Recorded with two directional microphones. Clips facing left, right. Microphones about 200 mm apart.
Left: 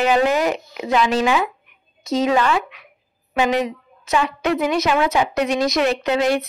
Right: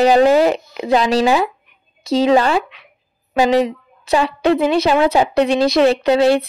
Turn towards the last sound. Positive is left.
turn(degrees=-30)  # may be behind; listen again after turning